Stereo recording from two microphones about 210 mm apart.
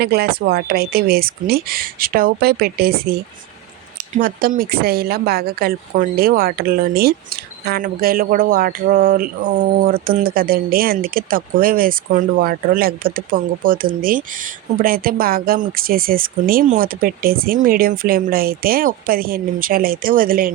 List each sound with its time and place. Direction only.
0.0 s speech: 50° right (ahead or behind)